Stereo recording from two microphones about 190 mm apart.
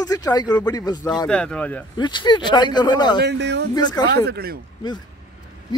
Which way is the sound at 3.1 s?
65° right (ahead or behind).